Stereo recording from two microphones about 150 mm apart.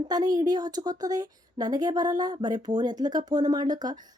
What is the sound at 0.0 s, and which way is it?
A woman's voice, 25° right (ahead or behind).